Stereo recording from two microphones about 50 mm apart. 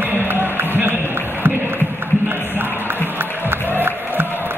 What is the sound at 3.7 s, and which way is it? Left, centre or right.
Crowd, right.